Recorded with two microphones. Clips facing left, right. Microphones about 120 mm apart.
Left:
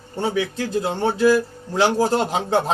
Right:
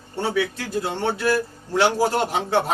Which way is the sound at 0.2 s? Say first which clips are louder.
Left 1 dB; 20° left (ahead or behind).